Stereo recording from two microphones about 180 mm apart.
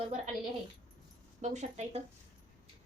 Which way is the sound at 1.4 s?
40° right (ahead or behind).